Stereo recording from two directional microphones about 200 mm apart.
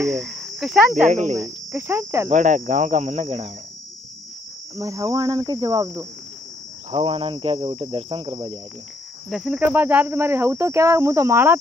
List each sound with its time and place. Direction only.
0.1 s speech: centre (ahead or behind)
1.0 s speech: 35° right (ahead or behind)
1.3 s speech: 15° right (ahead or behind)
2.2 s speech: 40° right (ahead or behind)
4.7 s speech: 15° right (ahead or behind)
9.3 s speech: centre (ahead or behind)